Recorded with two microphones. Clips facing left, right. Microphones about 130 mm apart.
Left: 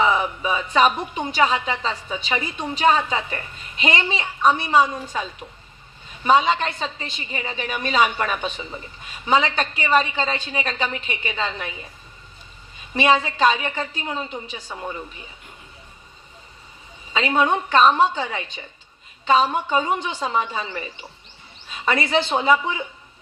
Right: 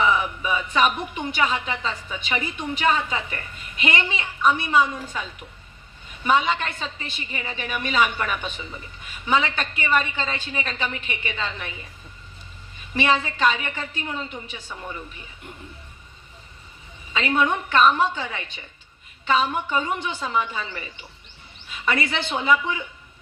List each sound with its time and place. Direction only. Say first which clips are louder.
0.0 s a woman's voice: left 2 dB; 30° left (ahead or behind)
13.0 s a woman's voice: left 3 dB; 25° left (ahead or behind)
17.1 s a woman's voice: left 2 dB; 25° left (ahead or behind)